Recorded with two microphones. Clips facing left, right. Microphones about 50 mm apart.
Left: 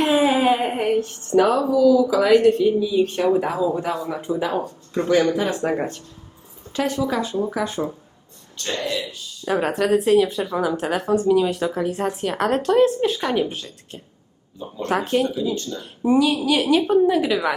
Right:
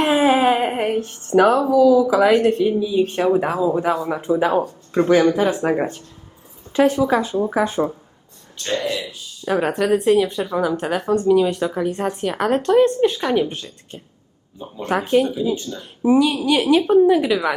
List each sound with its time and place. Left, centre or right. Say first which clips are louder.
0.0 s a woman's voice: right 2 dB; right
3.2 s speech: right 2 dB; centre; by 4.5 s right
4.9 s speech: right 4 dB; right
8.5 s a woman's voice: right 2 dB; centre
11.1 s speech: right 2 dB; centre
11.3 s a woman's voice: right 2 dB; centre